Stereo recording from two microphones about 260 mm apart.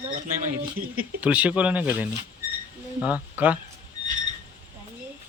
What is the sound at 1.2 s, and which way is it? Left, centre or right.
Speech, centre.